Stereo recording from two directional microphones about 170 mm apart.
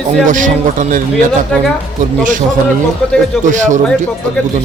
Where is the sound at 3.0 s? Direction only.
Centre (ahead or behind).